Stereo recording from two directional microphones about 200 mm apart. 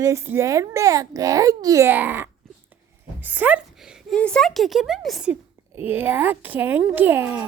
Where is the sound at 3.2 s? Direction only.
10° right (ahead or behind).